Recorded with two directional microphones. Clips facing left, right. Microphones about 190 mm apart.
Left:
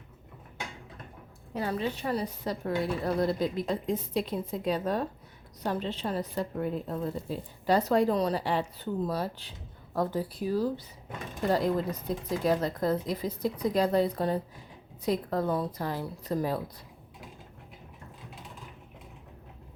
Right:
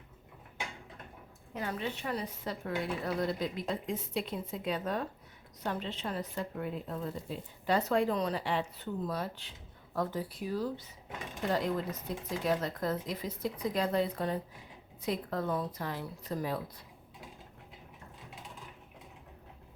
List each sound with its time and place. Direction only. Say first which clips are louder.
1.5 s a woman's voice: left 5 dB; 35° left (ahead or behind)